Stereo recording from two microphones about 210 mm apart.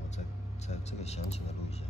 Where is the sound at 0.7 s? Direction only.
30° left (ahead or behind).